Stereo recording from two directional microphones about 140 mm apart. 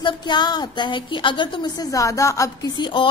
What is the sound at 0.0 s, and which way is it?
A woman's voice, 30° left (ahead or behind).